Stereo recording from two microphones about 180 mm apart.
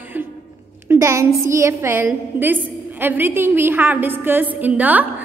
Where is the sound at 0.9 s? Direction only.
15° right (ahead or behind).